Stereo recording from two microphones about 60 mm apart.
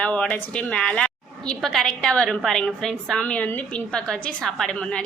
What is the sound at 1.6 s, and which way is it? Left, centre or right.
Speech, centre.